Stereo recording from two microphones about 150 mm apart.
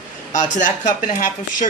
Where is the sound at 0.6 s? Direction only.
55° left (ahead or behind).